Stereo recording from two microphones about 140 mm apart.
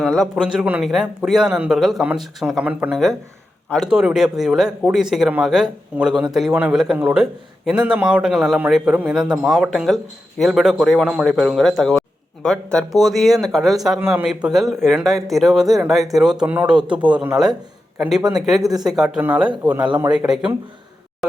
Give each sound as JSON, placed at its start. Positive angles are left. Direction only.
{"t": 0.0, "sound": "a man's voice", "side_deg": 0}
{"t": 18.2, "sound": "speech", "side_deg": -25}
{"t": 18.4, "sound": "a man's voice", "side_deg": 0}